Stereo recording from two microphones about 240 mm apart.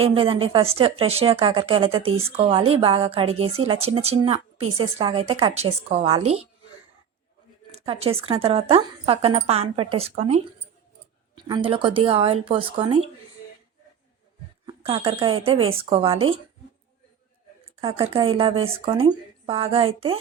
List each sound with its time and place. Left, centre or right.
0.0 s speech: right
7.7 s speech: right
14.7 s speech: centre
17.7 s speech: right